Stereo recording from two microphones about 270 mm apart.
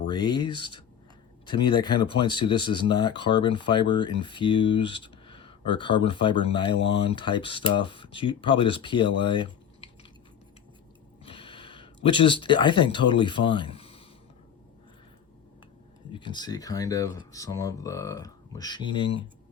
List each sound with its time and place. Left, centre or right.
0.0 s speech: centre
11.2 s speech: centre
16.1 s speech: centre